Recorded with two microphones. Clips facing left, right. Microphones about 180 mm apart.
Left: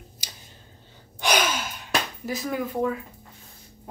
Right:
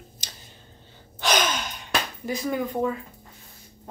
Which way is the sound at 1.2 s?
10° left (ahead or behind).